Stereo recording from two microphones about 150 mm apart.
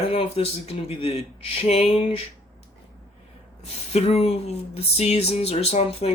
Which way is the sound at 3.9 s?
45° left (ahead or behind).